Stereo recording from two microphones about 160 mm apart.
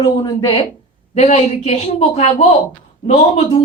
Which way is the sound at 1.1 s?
40° left (ahead or behind).